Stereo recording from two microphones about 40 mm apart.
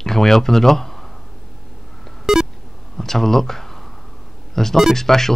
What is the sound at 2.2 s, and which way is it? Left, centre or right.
Beep, centre.